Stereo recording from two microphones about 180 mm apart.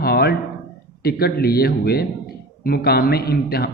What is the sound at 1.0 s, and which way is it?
A man's voice, 60° left (ahead or behind).